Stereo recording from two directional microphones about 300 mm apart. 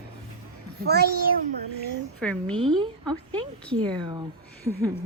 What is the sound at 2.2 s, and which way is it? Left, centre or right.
A woman's voice, centre.